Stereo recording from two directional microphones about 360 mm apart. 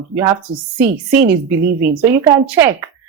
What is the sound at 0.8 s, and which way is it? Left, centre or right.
Speech, centre.